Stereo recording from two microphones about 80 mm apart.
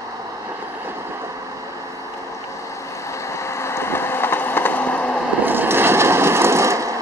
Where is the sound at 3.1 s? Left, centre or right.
Left; by 5.1 s centre.